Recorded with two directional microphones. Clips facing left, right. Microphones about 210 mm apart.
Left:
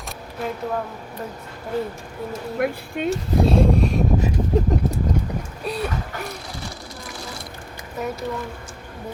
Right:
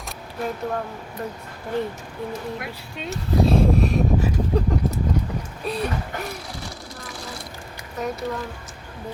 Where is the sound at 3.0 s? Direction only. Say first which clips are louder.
Left 9 dB; 55° left (ahead or behind).